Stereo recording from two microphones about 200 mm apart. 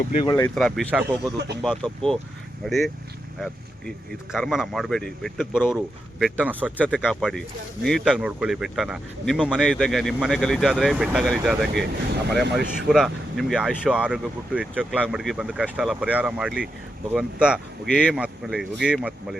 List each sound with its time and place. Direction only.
0.3 s speech: 15° left (ahead or behind)
0.5 s speech: centre (ahead or behind)
6.1 s speech: 5° right (ahead or behind)
6.7 s speech: 5° left (ahead or behind)